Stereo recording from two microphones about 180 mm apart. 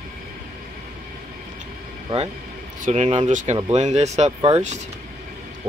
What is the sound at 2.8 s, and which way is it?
Speech, 40° right (ahead or behind).